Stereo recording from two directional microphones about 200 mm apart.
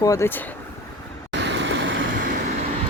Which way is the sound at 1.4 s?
65° right (ahead or behind).